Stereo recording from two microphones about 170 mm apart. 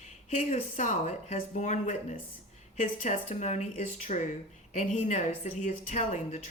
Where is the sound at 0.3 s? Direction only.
45° left (ahead or behind).